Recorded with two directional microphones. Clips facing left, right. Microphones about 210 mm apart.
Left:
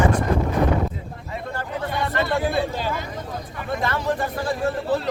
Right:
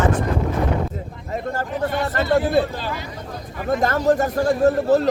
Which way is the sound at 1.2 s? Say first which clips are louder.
Right 6 dB; 45° right (ahead or behind).